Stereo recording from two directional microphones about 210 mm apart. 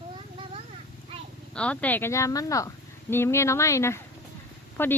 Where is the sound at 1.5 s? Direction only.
5° left (ahead or behind).